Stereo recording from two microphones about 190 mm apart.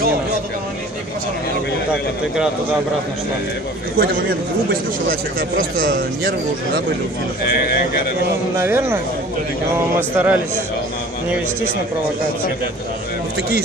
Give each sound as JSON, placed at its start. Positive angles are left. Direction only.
{"t": 8.5, "sound": "a man's voice", "side_deg": -15}